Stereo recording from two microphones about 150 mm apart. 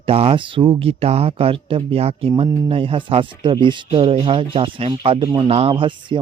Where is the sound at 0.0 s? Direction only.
40° right (ahead or behind).